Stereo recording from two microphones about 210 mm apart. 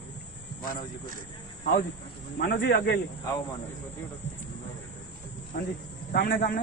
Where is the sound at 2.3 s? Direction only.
50° left (ahead or behind).